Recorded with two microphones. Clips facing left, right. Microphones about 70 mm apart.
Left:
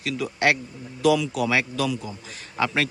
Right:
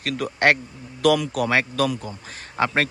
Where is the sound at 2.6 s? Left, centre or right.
Right.